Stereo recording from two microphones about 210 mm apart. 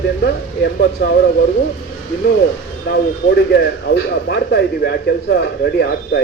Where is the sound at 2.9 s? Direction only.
50° left (ahead or behind).